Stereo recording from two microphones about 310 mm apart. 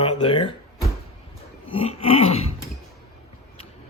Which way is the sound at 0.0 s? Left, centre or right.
Centre.